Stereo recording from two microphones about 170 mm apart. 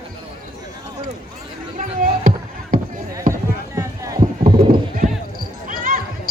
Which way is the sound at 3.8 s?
20° right (ahead or behind).